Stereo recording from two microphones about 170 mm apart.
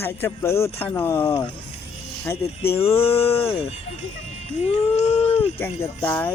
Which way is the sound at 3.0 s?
35° left (ahead or behind).